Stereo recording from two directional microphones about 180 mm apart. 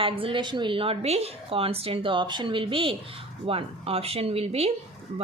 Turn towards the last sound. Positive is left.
turn(degrees=-35)  # may be behind; listen again after turning